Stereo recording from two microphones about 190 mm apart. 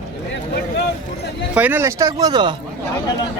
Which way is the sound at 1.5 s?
10° right (ahead or behind).